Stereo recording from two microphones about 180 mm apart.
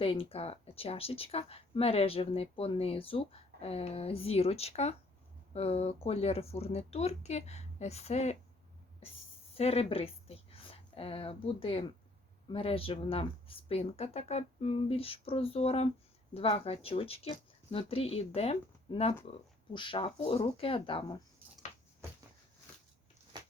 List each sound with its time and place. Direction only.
0.0 s speech: 30° left (ahead or behind)
9.6 s a woman's voice: 35° left (ahead or behind)